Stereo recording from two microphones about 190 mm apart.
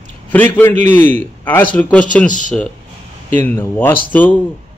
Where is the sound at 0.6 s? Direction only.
10° left (ahead or behind).